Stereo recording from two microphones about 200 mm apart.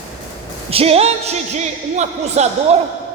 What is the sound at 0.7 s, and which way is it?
Speech, 30° right (ahead or behind).